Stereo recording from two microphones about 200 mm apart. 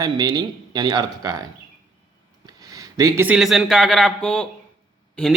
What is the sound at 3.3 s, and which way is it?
A man's voice, centre (ahead or behind).